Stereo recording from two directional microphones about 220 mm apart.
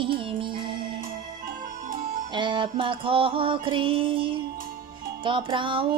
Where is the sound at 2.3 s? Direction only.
20° right (ahead or behind).